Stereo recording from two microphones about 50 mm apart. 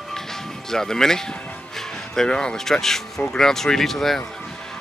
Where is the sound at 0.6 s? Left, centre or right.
Centre.